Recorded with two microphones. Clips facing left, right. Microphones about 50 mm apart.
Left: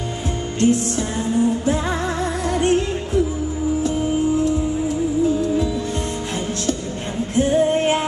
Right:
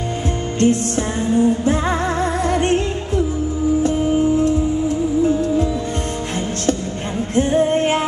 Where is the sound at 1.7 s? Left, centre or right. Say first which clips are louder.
Right 3 dB; right.